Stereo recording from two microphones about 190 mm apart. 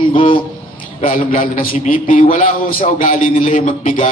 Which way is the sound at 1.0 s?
40° left (ahead or behind).